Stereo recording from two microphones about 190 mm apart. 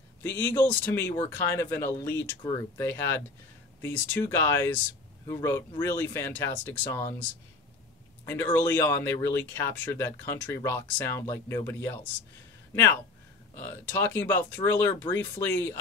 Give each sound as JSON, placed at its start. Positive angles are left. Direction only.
{"t": 0.2, "sound": "speech", "side_deg": 10}
{"t": 8.3, "sound": "speech", "side_deg": 10}
{"t": 13.7, "sound": "speech", "side_deg": 10}